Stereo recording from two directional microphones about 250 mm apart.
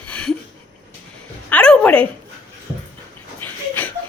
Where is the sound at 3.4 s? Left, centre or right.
Centre.